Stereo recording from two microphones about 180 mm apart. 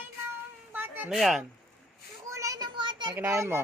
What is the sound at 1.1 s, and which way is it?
Speech, centre (ahead or behind).